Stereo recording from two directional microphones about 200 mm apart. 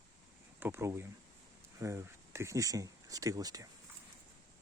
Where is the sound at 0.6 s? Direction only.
10° right (ahead or behind).